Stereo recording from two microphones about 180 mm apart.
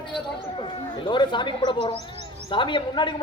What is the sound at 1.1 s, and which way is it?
A woman's voice, 25° left (ahead or behind).